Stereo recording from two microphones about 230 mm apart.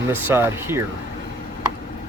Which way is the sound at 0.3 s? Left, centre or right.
Centre.